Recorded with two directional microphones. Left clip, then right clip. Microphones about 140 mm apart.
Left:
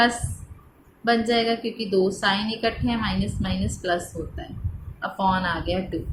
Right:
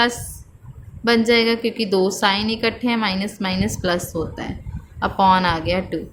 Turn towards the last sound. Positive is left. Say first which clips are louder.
# right 6 dB
turn(degrees=-80)